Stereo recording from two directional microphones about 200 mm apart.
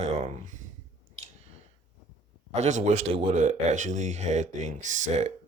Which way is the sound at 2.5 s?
35° right (ahead or behind).